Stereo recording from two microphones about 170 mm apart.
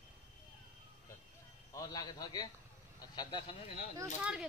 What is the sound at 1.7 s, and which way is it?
A man's voice, 20° left (ahead or behind).